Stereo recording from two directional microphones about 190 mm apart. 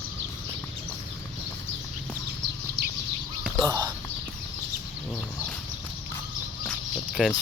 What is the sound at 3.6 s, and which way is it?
Speech, 20° right (ahead or behind).